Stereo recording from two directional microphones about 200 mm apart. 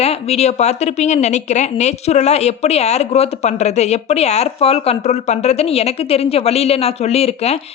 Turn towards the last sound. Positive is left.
turn(degrees=30)  # may be behind; listen again after turning